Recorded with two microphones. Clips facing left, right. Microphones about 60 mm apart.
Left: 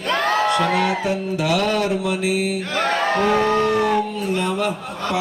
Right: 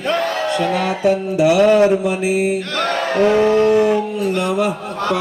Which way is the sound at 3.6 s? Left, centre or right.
Centre.